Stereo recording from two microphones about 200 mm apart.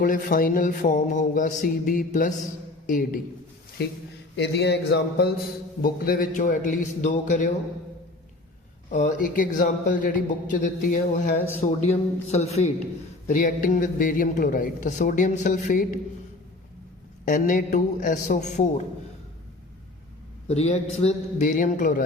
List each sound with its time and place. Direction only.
0.0 s a man's voice: 45° left (ahead or behind)
3.8 s speech: 55° left (ahead or behind)
5.8 s a man's voice: 45° left (ahead or behind)
8.9 s a man's voice: 40° left (ahead or behind)
17.2 s a man's voice: 45° left (ahead or behind)
20.5 s a man's voice: 30° left (ahead or behind)